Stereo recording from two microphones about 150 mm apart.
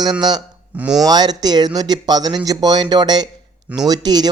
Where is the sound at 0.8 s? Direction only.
5° right (ahead or behind).